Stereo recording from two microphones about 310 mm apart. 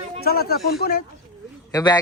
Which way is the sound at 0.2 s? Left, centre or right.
Left.